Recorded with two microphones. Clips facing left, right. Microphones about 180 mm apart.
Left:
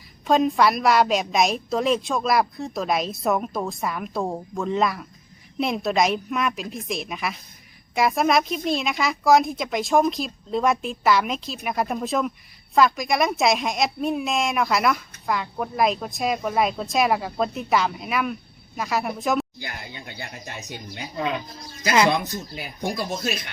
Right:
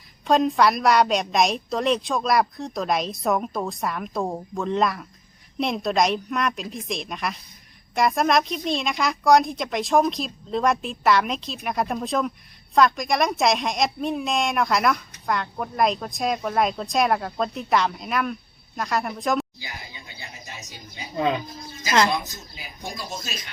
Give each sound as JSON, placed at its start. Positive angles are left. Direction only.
{"t": 0.3, "sound": "a woman's voice", "side_deg": 0}
{"t": 19.5, "sound": "speech", "side_deg": 60}
{"t": 22.1, "sound": "speech", "side_deg": 60}